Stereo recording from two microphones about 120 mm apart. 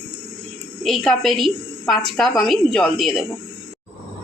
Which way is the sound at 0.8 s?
5° left (ahead or behind).